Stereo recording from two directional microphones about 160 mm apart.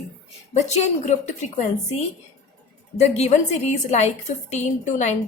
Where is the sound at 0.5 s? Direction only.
45° left (ahead or behind).